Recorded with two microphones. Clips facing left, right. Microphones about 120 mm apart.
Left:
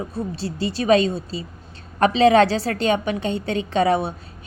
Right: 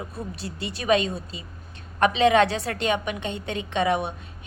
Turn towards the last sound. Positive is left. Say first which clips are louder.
# left 5 dB
turn(degrees=35)  # may be behind; listen again after turning